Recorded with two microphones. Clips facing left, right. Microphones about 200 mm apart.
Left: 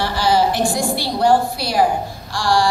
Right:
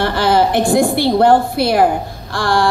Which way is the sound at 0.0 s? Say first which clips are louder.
Right 3 dB; 55° right (ahead or behind).